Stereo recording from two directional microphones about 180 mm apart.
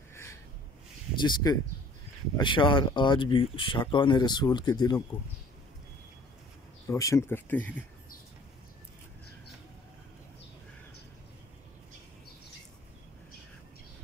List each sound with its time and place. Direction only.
0.1 s snort: 15° left (ahead or behind)
1.2 s speech: 20° left (ahead or behind)
6.9 s speech: 15° left (ahead or behind)